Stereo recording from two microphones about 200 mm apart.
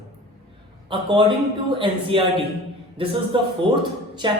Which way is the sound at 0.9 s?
25° right (ahead or behind).